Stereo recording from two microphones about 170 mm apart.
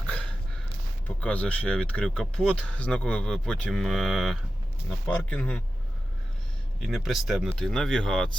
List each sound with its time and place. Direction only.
0.0 s dog: 5° left (ahead or behind)
1.0 s speech: 10° left (ahead or behind)
6.7 s speech: centre (ahead or behind)